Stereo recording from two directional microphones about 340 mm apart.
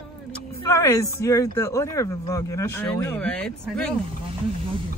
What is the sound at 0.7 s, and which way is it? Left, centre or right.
Speech, centre.